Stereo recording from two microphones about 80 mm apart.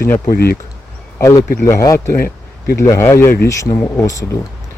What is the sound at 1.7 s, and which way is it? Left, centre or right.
Speech, left.